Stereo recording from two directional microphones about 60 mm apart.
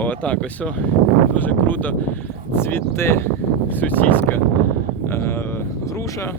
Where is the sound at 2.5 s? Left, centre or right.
Left.